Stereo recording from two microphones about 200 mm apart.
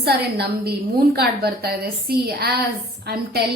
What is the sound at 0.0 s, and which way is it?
A woman's voice, 50° right (ahead or behind).